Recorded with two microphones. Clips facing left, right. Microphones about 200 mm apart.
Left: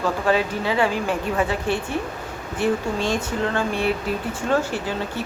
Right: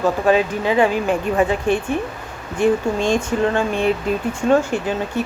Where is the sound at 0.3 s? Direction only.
15° right (ahead or behind).